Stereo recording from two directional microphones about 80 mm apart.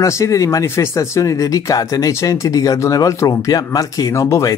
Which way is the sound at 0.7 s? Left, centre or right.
Left.